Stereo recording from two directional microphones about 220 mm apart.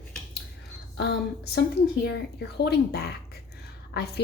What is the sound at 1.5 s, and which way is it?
A woman's voice, 45° left (ahead or behind).